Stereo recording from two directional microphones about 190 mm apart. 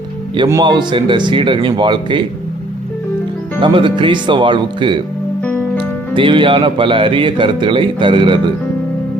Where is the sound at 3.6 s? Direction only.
25° right (ahead or behind).